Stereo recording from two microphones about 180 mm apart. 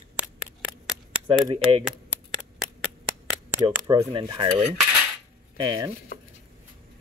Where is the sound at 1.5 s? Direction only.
30° right (ahead or behind).